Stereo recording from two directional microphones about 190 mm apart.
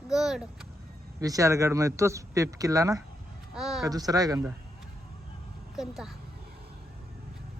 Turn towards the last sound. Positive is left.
turn(degrees=0)  # may be behind; listen again after turning